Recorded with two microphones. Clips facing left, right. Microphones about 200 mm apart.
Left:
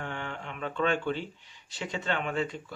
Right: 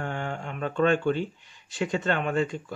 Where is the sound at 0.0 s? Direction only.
45° right (ahead or behind).